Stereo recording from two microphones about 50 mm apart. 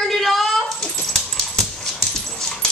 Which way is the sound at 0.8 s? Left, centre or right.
Centre.